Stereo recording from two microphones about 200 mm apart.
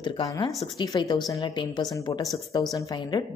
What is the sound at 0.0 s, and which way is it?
A woman's voice, 20° left (ahead or behind).